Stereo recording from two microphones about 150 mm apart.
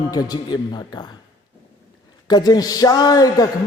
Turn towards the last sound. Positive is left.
turn(degrees=25)  # may be behind; listen again after turning